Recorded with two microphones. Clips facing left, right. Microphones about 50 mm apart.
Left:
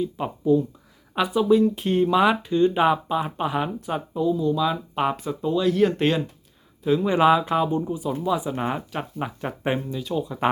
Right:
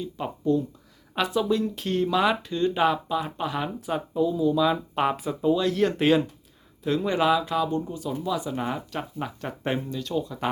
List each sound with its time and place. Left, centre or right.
0.0 s speech: centre
3.8 s speech: centre
7.1 s speech: left
7.7 s speech: centre
10.2 s speech: left